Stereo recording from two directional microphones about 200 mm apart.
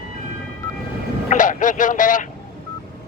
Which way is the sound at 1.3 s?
40° left (ahead or behind).